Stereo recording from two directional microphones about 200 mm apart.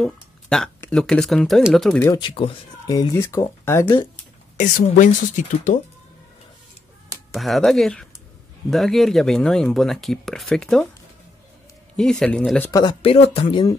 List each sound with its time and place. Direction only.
0.0 s speech: 5° left (ahead or behind)
2.0 s speech: 25° left (ahead or behind)
4.6 s speech: 40° left (ahead or behind)
7.3 s speech: centre (ahead or behind)
12.0 s speech: 5° left (ahead or behind)
12.7 s speech: 25° left (ahead or behind)